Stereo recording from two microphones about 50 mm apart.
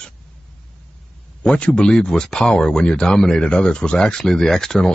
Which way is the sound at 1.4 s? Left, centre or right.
Centre.